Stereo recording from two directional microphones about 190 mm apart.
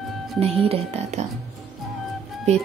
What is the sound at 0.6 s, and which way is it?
Speech, 30° right (ahead or behind).